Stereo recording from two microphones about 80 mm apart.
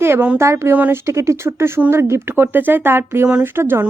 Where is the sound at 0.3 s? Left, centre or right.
Right.